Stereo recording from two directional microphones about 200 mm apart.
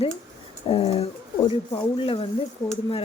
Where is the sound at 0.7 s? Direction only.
30° left (ahead or behind).